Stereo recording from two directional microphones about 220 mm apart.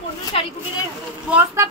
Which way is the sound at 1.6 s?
15° right (ahead or behind).